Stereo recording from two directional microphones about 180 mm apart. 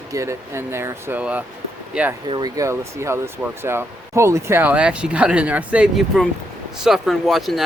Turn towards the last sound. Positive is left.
turn(degrees=0)  # may be behind; listen again after turning